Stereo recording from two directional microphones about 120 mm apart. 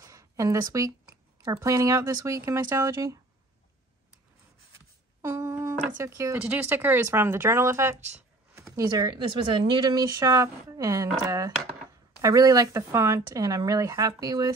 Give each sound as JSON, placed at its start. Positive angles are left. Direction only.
{"t": 0.0, "sound": "speech", "side_deg": -25}
{"t": 5.2, "sound": "a sound", "side_deg": -25}
{"t": 5.9, "sound": "speech", "side_deg": -25}